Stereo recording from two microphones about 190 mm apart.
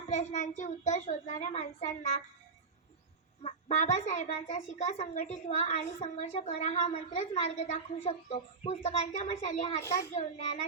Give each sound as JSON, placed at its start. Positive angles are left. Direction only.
{"t": 0.1, "sound": "a woman's voice", "side_deg": 35}
{"t": 3.4, "sound": "a woman's voice", "side_deg": 35}
{"t": 9.8, "sound": "a child's voice", "side_deg": 15}
{"t": 10.1, "sound": "a woman's voice", "side_deg": 35}